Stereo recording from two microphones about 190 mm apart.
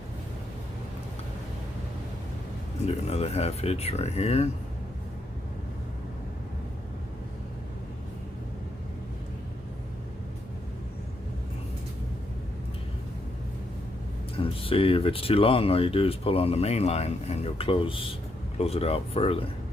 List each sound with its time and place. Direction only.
2.8 s speech: 35° left (ahead or behind)
14.3 s speech: 30° left (ahead or behind)